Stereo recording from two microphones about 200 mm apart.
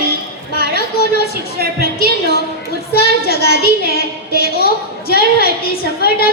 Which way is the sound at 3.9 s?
50° left (ahead or behind).